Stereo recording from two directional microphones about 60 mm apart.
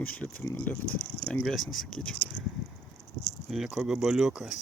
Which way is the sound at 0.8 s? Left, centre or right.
Left.